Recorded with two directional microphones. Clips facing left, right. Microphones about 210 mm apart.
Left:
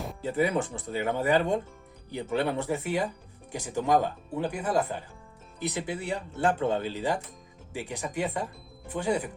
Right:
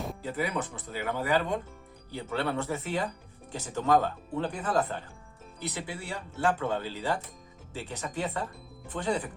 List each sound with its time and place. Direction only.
0.2 s speech: 25° left (ahead or behind); by 9.3 s 10° left (ahead or behind)